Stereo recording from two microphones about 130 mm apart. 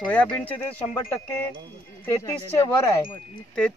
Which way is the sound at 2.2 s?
25° left (ahead or behind).